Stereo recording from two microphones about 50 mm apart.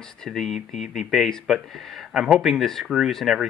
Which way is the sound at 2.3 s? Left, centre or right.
Centre.